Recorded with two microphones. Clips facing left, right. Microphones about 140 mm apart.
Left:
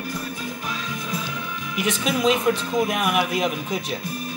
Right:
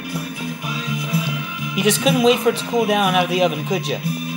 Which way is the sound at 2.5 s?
90° right.